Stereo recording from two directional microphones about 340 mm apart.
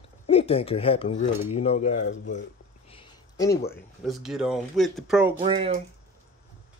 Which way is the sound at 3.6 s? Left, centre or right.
Centre.